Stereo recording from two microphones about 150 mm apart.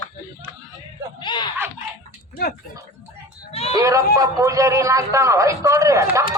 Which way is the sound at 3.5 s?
45° left (ahead or behind).